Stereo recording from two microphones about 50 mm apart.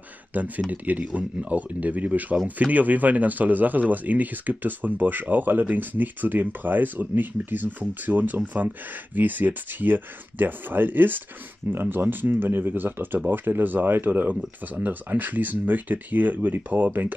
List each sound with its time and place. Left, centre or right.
0.3 s speech: right